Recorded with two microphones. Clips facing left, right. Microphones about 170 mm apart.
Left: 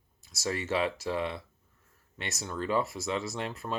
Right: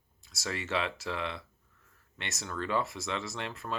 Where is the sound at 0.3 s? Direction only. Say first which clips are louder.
Left 3 dB; 40° left (ahead or behind).